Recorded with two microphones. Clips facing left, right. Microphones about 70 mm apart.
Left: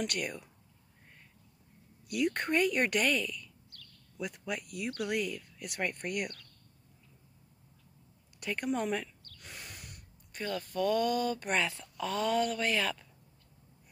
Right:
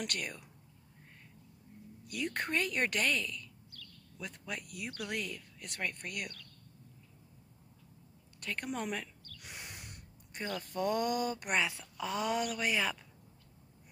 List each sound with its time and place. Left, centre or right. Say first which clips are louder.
0.0 s speech: left 4 dB; centre
2.0 s speech: left 6 dB; centre; by 6.3 s left
8.4 s speech: left 3 dB; centre
8.6 s speech: left 7 dB; centre
9.5 s speech: even; right